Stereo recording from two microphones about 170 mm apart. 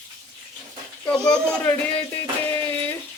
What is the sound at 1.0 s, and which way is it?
Speech, 5° left (ahead or behind).